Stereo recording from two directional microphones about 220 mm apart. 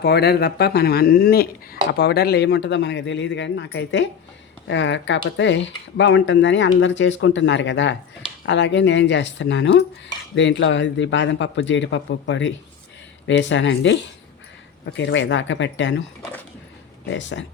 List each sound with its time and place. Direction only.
0.0 s speech: 50° left (ahead or behind)
17.1 s speech: 55° left (ahead or behind)